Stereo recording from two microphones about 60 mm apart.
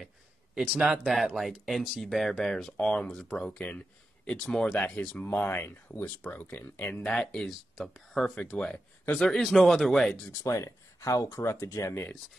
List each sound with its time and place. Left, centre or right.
0.7 s a man's voice: centre
1.0 s speech: centre
3.5 s speech: left
4.5 s speech: centre
4.9 s speech: centre
5.2 s speech: left
7.2 s speech: centre
8.4 s speech: centre
10.4 s speech: left
11.3 s speech: left